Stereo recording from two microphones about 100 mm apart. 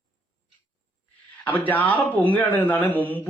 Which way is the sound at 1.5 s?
15° left (ahead or behind).